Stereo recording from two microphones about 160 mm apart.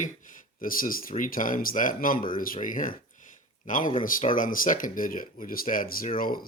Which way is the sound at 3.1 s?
55° left (ahead or behind).